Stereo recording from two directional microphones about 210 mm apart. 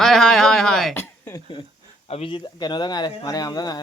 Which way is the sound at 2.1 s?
25° left (ahead or behind).